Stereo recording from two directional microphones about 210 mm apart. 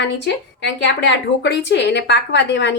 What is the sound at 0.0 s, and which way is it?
A woman's voice, 55° left (ahead or behind).